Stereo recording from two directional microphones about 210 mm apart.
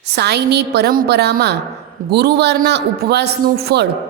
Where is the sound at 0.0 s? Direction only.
55° right (ahead or behind).